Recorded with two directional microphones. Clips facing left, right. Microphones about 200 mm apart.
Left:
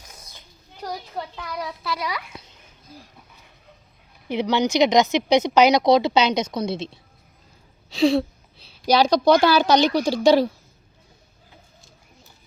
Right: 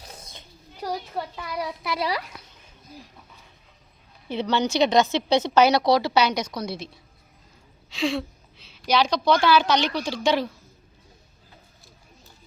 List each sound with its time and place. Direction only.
0.8 s a child's voice: 5° right (ahead or behind)
1.9 s a child's voice: 30° right (ahead or behind)
4.3 s speech: 15° left (ahead or behind)
7.9 s a woman's voice: 35° left (ahead or behind)